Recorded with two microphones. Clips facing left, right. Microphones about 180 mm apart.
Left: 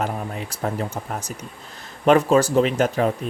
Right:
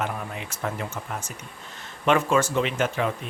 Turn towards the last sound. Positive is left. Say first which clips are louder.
# left 5 dB
turn(degrees=40)  # may be behind; listen again after turning